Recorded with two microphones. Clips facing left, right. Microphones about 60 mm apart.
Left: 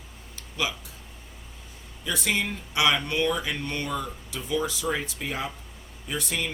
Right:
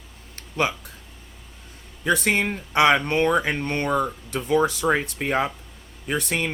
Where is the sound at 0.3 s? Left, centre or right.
Right.